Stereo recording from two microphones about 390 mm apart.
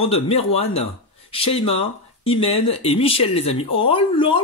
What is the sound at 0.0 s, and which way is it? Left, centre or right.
Speech, centre.